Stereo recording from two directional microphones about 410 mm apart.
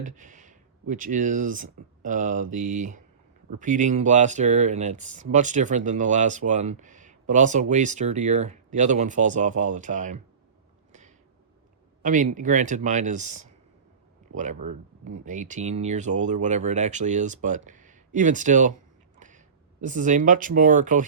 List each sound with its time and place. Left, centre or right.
0.0 s speech: centre
12.0 s speech: centre
19.2 s a sound: centre
19.8 s speech: centre